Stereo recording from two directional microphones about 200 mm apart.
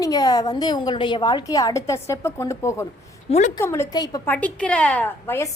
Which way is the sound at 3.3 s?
35° left (ahead or behind).